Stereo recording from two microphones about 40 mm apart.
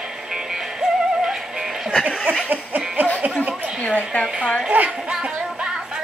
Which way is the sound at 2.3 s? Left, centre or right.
Right.